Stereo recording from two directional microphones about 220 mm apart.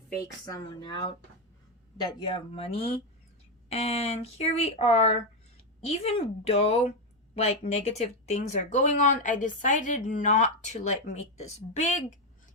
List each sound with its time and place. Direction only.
0.4 s speech: 20° left (ahead or behind)